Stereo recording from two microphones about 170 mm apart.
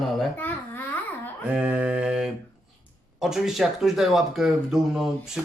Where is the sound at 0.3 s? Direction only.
10° left (ahead or behind).